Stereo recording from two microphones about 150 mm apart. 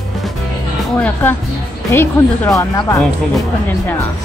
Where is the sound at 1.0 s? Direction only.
15° left (ahead or behind).